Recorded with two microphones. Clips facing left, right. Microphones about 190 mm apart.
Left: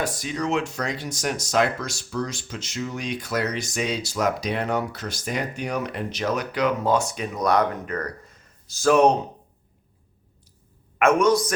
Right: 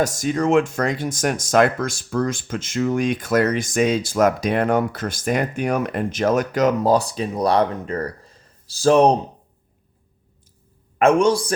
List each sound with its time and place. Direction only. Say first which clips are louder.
0.0 s speech: right 7 dB; 45° right (ahead or behind)
11.0 s a man's voice: right 3 dB; 30° right (ahead or behind)